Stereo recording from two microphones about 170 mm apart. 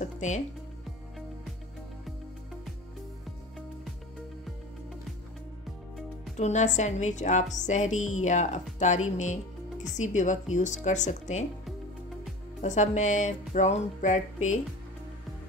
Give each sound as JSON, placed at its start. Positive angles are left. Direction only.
{"t": 0.0, "sound": "music", "side_deg": 45}
{"t": 6.3, "sound": "a woman's voice", "side_deg": 45}
{"t": 12.6, "sound": "a woman's voice", "side_deg": 45}